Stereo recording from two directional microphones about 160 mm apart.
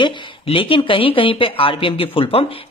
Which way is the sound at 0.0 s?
35° left (ahead or behind).